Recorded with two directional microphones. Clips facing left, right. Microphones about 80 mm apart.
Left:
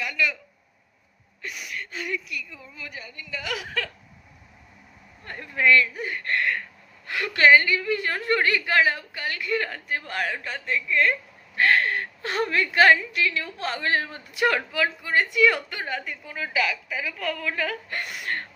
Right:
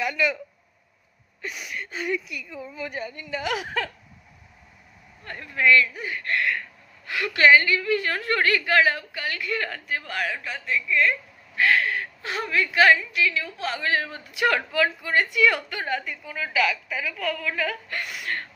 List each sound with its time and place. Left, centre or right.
0.0 s speech: right
1.7 s speech: centre
2.9 s a woman's voice: right
5.2 s a woman's voice: left
7.1 s a woman's voice: left; by 17.7 s centre
17.8 s a woman's voice: left